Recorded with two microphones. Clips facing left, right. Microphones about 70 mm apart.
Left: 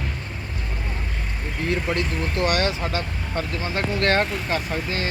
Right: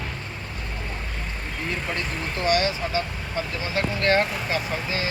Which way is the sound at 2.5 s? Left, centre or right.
Left.